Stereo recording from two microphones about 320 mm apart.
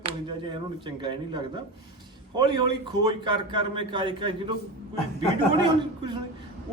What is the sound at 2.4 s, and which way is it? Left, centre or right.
A man's voice, centre.